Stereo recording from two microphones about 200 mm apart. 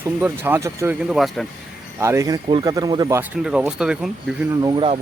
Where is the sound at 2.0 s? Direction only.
15° right (ahead or behind).